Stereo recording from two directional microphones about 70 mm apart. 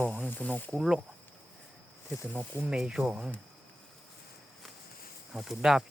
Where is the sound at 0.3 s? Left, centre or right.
Left.